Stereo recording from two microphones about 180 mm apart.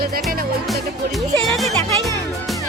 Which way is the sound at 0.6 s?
Centre (ahead or behind).